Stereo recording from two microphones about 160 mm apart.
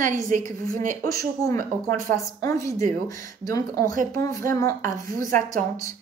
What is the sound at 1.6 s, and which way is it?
Speech, 55° right (ahead or behind).